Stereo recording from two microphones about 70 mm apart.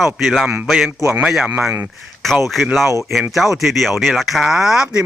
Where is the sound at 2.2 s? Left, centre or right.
Centre.